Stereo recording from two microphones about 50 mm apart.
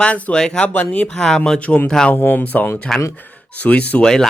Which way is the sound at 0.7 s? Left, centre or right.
Left.